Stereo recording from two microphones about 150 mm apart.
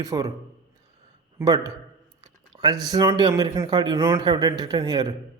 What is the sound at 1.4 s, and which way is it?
Speech, 25° right (ahead or behind).